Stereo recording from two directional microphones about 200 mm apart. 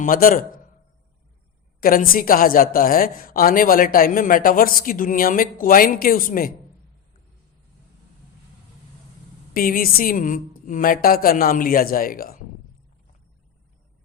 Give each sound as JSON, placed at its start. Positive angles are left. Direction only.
{"t": 0.0, "sound": "a man's voice", "side_deg": 45}
{"t": 1.8, "sound": "a woman's voice", "side_deg": 45}
{"t": 9.5, "sound": "a woman's voice", "side_deg": 45}